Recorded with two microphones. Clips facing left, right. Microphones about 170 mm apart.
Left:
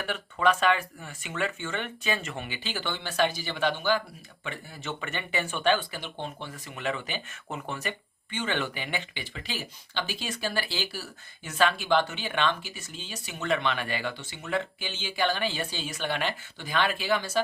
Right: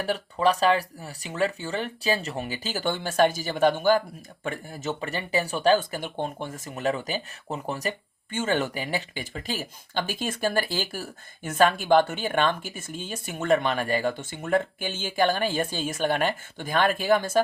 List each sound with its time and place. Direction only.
0.0 s speech: 35° right (ahead or behind)